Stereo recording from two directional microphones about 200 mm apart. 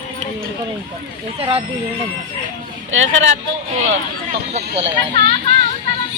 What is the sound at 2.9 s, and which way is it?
Speech, 75° right (ahead or behind).